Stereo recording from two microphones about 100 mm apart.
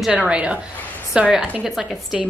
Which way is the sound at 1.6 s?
Centre (ahead or behind).